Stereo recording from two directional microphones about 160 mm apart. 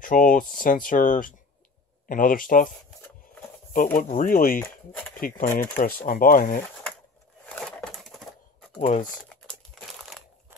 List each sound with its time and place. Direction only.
0.0 s speech: 60° left (ahead or behind)
3.7 s speech: 60° left (ahead or behind)
4.6 s speech: 10° left (ahead or behind)
5.1 s speech: 65° left (ahead or behind)
7.4 s a sound: 5° left (ahead or behind)
9.8 s crumpling: centre (ahead or behind)